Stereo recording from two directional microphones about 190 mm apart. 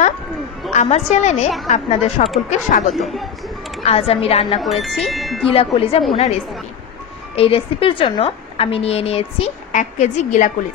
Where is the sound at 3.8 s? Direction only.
30° left (ahead or behind).